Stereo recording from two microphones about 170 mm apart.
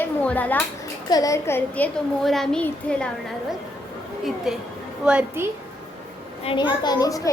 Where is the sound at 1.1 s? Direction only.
20° left (ahead or behind).